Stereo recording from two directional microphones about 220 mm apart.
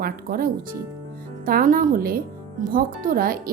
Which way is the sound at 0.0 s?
40° right (ahead or behind).